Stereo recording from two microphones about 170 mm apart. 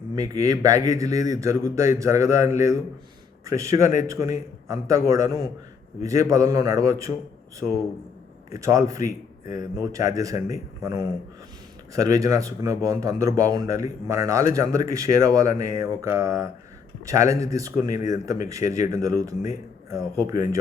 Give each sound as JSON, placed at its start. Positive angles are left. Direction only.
{"t": 0.2, "sound": "speech", "side_deg": -20}
{"t": 8.5, "sound": "speech", "side_deg": -20}